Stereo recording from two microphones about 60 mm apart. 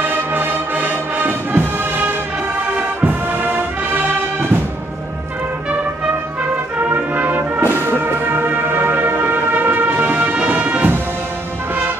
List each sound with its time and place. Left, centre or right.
0.0 s music: right
3.0 s music: right
6.4 s music: right